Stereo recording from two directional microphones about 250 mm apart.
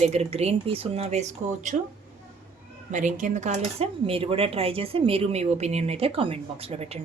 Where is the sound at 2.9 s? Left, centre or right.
Right.